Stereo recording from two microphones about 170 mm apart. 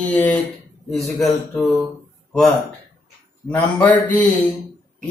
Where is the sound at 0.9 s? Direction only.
Centre (ahead or behind).